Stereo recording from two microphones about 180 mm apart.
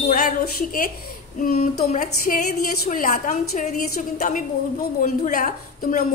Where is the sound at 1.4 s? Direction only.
45° left (ahead or behind).